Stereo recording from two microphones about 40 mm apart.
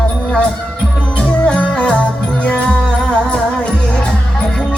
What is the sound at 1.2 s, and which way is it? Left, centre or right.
Music, left.